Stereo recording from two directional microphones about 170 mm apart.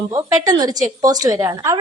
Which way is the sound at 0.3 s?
20° right (ahead or behind).